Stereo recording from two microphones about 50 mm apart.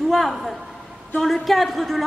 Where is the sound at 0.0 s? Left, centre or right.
Centre.